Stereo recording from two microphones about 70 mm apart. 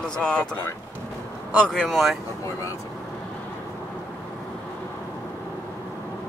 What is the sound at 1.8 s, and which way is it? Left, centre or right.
Speech, centre.